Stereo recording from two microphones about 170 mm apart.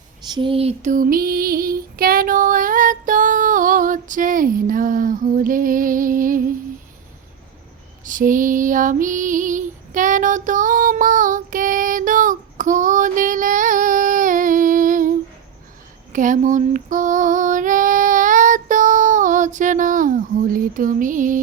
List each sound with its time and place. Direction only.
0.3 s female singing: 30° right (ahead or behind); by 6.4 s 55° right (ahead or behind)
8.0 s female singing: 50° right (ahead or behind)
16.1 s female singing: 50° right (ahead or behind)